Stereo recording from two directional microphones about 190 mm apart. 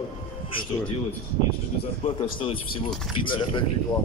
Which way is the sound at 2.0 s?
30° left (ahead or behind).